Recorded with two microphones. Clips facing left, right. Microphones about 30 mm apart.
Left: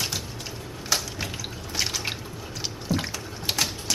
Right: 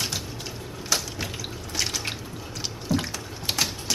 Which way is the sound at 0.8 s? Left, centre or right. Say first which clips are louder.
Even; centre.